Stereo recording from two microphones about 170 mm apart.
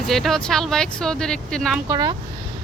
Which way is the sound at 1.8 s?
25° right (ahead or behind).